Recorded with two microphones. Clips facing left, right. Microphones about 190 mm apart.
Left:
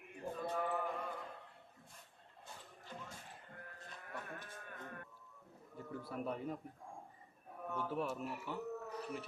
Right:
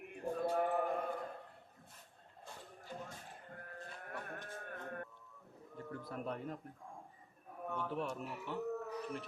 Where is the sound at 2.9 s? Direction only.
45° right (ahead or behind).